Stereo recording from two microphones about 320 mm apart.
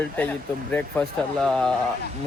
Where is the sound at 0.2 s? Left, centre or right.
Centre.